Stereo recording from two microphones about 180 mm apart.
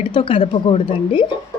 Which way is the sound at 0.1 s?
30° left (ahead or behind).